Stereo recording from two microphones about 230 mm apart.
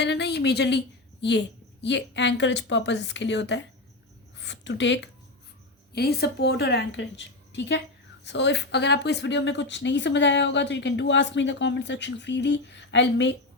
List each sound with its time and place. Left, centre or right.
0.0 s a woman's voice: left